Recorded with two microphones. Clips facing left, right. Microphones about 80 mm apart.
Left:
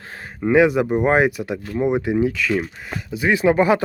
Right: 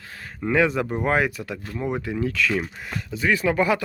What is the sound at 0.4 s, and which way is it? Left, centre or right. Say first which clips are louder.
Speech: left 6 dB; centre.